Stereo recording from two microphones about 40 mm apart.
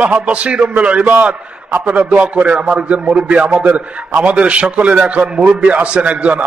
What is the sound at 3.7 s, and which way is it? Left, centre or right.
A man's voice, right.